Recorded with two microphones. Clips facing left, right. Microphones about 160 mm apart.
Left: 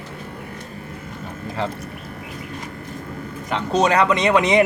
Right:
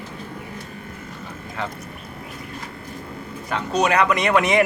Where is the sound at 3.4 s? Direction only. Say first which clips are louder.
Left 2 dB; 25° left (ahead or behind).